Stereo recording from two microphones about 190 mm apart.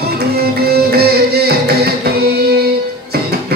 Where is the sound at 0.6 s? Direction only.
55° right (ahead or behind).